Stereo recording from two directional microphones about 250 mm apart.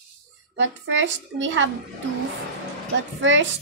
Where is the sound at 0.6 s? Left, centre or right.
Right.